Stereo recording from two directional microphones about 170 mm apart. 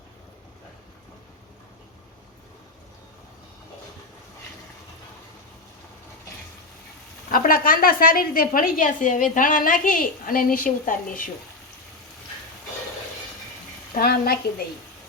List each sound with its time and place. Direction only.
7.3 s a woman's voice: 55° left (ahead or behind)
13.9 s a woman's voice: 65° left (ahead or behind)